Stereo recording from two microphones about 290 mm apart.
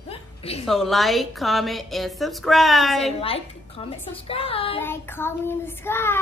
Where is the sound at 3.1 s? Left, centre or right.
Centre.